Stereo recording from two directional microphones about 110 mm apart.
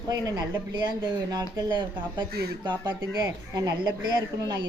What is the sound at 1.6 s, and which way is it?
Speech, 45° right (ahead or behind).